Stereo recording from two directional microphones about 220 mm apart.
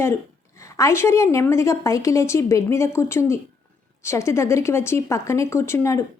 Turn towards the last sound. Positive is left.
turn(degrees=10)  # may be behind; listen again after turning